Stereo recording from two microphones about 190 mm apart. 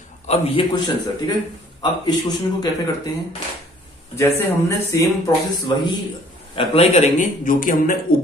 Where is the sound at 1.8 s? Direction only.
20° left (ahead or behind).